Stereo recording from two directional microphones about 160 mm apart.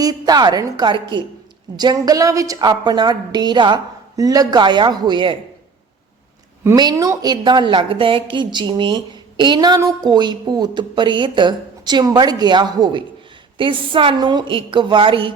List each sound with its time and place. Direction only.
0.0 s a woman's voice: 25° right (ahead or behind)
6.7 s a woman's voice: 20° right (ahead or behind)